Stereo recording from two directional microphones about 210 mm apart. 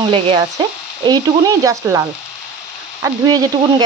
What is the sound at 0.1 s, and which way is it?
Speech, 25° right (ahead or behind).